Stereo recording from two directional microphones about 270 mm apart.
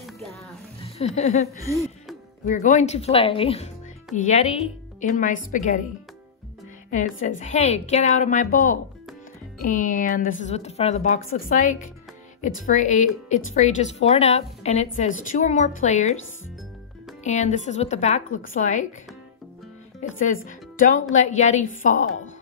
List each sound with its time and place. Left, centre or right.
0.8 s speech: left
1.6 s speech: centre
2.4 s speech: left
6.9 s speech: left
17.2 s a woman's voice: left
20.0 s a woman's voice: left